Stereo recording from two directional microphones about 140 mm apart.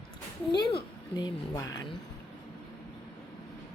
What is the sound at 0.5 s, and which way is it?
A woman's voice, 30° left (ahead or behind).